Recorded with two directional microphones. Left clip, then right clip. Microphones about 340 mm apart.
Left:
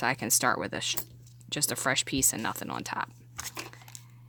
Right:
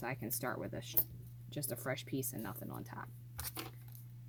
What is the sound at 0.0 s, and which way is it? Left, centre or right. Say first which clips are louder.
Speech: left 15 dB; left.